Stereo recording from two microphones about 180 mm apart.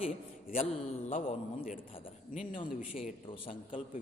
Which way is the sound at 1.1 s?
45° left (ahead or behind).